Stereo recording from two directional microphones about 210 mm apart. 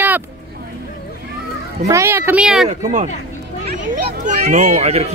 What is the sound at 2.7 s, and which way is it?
A child's voice, 35° right (ahead or behind).